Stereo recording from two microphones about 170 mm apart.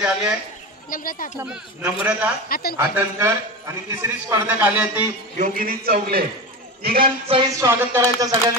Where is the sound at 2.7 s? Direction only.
15° right (ahead or behind).